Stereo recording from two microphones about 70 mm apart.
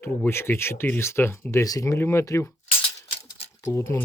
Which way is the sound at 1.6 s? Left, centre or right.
Left.